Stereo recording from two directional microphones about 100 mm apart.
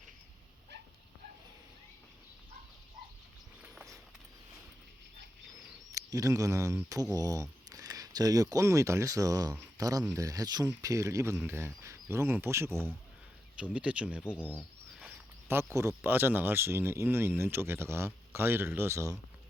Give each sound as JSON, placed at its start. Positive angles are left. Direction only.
{"t": 5.9, "sound": "speech", "side_deg": -35}
{"t": 13.6, "sound": "speech", "side_deg": -10}
{"t": 15.4, "sound": "speech", "side_deg": -25}